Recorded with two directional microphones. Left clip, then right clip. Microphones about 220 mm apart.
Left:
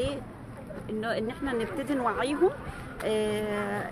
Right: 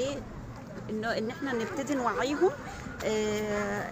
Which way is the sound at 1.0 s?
5° left (ahead or behind).